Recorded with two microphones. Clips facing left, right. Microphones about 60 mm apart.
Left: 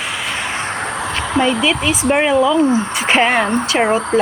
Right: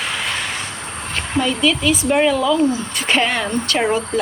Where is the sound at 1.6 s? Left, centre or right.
Left.